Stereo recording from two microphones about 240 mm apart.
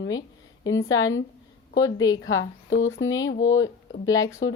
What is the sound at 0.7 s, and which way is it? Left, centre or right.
Speech, left.